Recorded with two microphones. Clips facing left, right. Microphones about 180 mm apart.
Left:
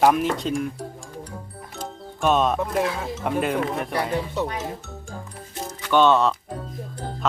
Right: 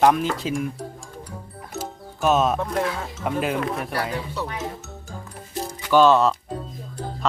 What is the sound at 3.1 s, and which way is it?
Cowbell, centre (ahead or behind).